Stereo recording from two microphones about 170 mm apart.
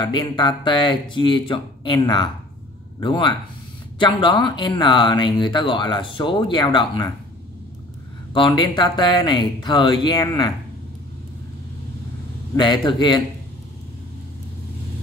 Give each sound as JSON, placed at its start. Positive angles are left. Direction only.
{"t": 0.0, "sound": "speech", "side_deg": 30}
{"t": 8.3, "sound": "speech", "side_deg": 30}
{"t": 12.5, "sound": "speech", "side_deg": 30}